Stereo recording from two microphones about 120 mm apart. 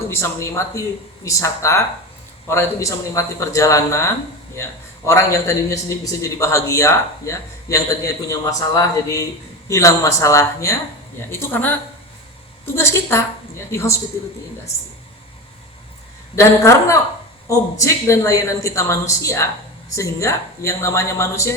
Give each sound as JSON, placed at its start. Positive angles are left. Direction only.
{"t": 0.1, "sound": "a man's voice", "side_deg": 20}
{"t": 16.3, "sound": "a man's voice", "side_deg": 25}